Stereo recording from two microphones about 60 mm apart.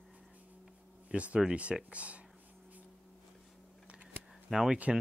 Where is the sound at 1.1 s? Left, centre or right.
Right.